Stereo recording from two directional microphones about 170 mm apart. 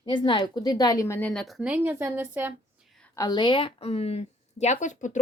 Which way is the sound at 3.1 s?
20° left (ahead or behind).